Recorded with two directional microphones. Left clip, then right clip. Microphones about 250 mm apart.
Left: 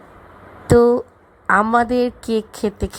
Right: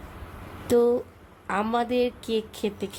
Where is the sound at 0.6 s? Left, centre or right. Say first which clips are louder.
Left 8 dB; left.